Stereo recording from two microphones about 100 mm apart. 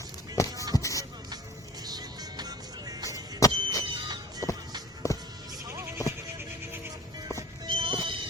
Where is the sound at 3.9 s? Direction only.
45° right (ahead or behind).